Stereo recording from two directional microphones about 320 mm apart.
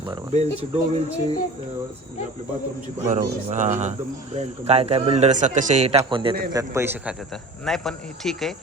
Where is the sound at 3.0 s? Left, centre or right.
Right.